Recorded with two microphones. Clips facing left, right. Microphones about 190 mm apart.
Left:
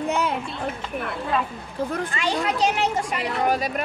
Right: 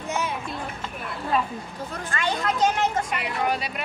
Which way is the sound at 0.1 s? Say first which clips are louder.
Left 2 dB; 60° left (ahead or behind).